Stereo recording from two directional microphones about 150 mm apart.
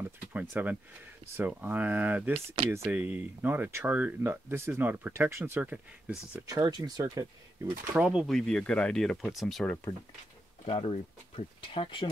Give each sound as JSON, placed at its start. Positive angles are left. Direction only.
{"t": 0.0, "sound": "a sound", "side_deg": -10}
{"t": 1.3, "sound": "speech", "side_deg": -15}
{"t": 6.4, "sound": "speech", "side_deg": -25}
{"t": 7.9, "sound": "speech", "side_deg": -5}
{"t": 10.6, "sound": "speech", "side_deg": 45}